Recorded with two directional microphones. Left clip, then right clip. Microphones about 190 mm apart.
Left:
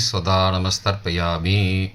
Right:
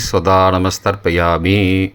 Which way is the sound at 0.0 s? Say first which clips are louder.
Right 8 dB; 50° right (ahead or behind).